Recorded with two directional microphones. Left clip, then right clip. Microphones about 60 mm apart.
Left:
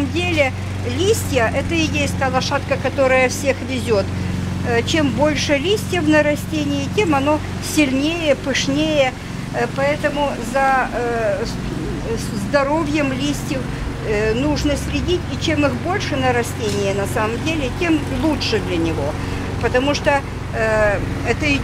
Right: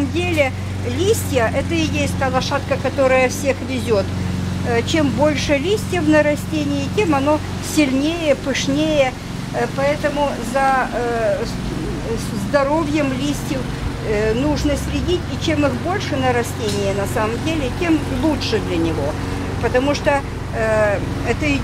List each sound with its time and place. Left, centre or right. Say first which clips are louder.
0.1 s vehicle: left 1 dB; centre
0.9 s speech: even; centre
12.5 s speech: even; centre